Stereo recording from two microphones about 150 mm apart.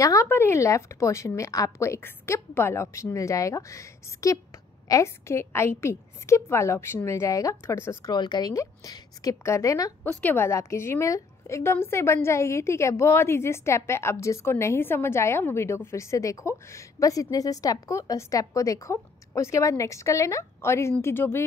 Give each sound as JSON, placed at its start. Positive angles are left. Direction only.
{"t": 0.0, "sound": "a woman's voice", "side_deg": 20}
{"t": 8.1, "sound": "a woman's voice", "side_deg": 30}